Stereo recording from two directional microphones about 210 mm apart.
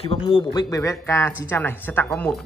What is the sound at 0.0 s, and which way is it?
Speech, 25° left (ahead or behind).